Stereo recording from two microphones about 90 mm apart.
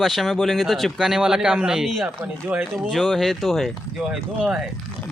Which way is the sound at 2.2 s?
15° right (ahead or behind).